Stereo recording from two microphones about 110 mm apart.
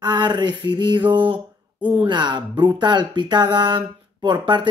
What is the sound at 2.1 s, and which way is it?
Speech, 45° right (ahead or behind).